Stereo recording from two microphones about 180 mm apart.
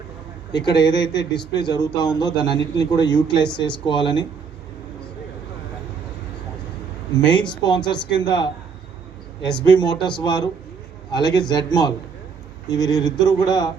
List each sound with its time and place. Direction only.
0.5 s speech: 25° left (ahead or behind)
7.6 s speech: 25° left (ahead or behind)
9.6 s speech: 25° left (ahead or behind)